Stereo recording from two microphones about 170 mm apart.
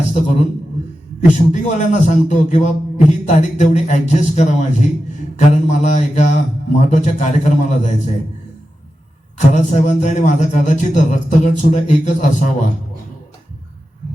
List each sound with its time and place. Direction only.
0.1 s a man's voice: 40° left (ahead or behind)
1.5 s a man's voice: 45° left (ahead or behind)
9.5 s a man's voice: 45° left (ahead or behind)